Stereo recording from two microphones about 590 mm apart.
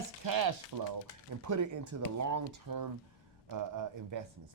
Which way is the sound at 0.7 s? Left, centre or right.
Right.